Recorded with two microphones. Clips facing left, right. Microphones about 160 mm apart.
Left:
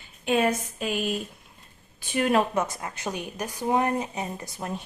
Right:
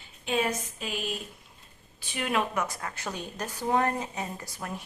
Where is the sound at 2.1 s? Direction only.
45° left (ahead or behind).